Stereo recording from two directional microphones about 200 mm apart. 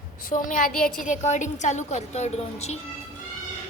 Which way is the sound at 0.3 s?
40° left (ahead or behind).